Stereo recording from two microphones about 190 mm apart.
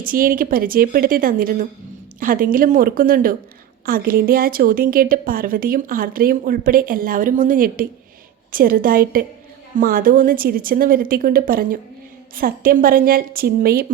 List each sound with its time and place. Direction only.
0.0 s a woman's voice: 50° right (ahead or behind)